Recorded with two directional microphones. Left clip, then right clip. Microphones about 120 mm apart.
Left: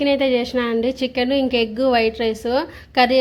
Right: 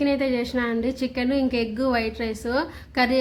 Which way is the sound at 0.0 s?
25° left (ahead or behind).